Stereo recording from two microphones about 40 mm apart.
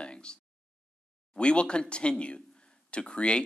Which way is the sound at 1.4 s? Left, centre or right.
Left.